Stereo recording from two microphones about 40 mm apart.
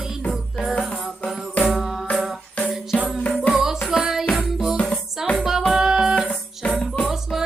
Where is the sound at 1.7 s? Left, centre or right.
Centre.